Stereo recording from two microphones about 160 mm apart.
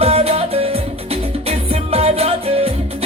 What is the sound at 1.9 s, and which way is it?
Music, 40° right (ahead or behind).